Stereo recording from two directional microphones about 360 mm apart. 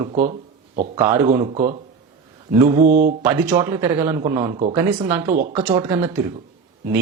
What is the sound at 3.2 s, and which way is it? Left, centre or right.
Speech, centre.